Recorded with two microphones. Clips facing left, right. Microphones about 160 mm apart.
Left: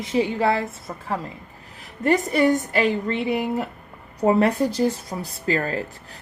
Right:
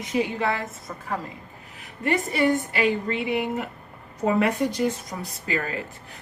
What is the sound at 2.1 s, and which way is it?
Speech, 40° left (ahead or behind).